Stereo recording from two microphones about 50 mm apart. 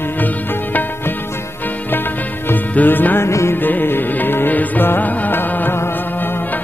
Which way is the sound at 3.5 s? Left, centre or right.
Left.